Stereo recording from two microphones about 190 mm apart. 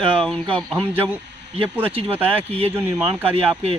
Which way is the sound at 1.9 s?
30° right (ahead or behind).